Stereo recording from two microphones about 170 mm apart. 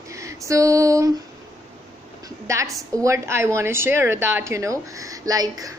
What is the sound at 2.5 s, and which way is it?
Speech, 20° right (ahead or behind).